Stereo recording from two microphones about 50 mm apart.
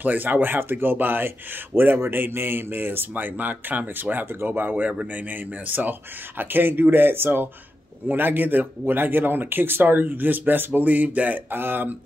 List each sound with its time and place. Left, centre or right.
0.0 s speech: right
4.8 s speech: right